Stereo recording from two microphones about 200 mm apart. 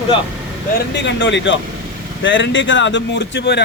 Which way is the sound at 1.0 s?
65° left (ahead or behind).